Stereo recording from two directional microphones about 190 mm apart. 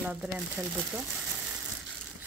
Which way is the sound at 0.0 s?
10° right (ahead or behind).